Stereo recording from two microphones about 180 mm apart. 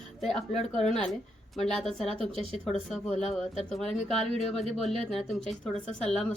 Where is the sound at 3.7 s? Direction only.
5° left (ahead or behind).